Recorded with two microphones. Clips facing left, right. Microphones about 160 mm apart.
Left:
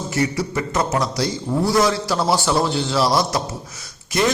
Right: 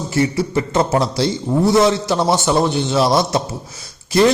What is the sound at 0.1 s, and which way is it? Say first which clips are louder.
A man's voice: right 5 dB; 25° right (ahead or behind).